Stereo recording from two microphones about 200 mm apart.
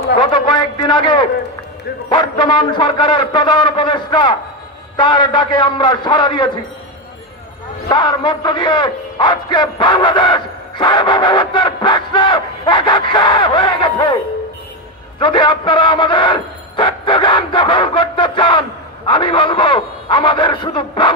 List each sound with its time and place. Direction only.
0.2 s a sound: 25° left (ahead or behind)
2.0 s a man's voice: 20° left (ahead or behind)
7.9 s a man's voice: 25° left (ahead or behind)
15.1 s a man's voice: 25° left (ahead or behind)